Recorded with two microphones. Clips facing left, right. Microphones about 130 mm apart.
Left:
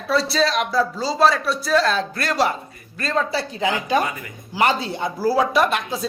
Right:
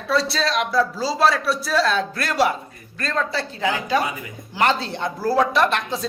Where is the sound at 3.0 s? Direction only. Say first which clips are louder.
Left 2 dB; 10° left (ahead or behind).